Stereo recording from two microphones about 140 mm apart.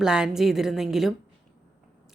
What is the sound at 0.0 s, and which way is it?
Speech, 5° right (ahead or behind).